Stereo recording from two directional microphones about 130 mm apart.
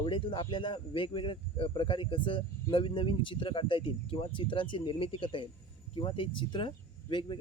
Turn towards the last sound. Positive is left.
turn(degrees=35)  # may be behind; listen again after turning